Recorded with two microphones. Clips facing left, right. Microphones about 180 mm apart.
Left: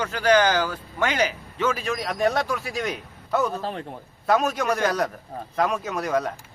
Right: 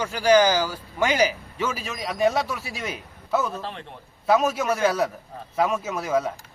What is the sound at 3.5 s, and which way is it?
Speech, 40° left (ahead or behind).